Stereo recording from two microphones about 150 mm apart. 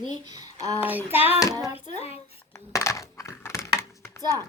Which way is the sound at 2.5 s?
20° left (ahead or behind).